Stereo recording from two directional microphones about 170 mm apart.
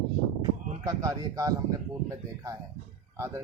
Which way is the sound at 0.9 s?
20° right (ahead or behind).